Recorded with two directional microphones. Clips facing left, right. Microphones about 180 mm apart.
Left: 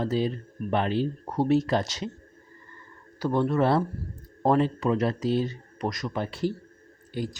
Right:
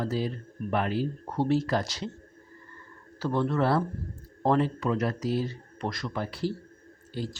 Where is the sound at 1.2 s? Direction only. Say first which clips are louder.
Left 3 dB; 15° left (ahead or behind).